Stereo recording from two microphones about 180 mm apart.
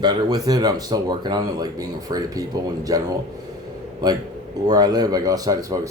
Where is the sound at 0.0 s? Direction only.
25° right (ahead or behind).